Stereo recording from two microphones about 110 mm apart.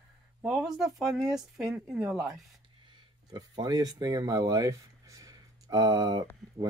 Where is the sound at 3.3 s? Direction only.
40° right (ahead or behind).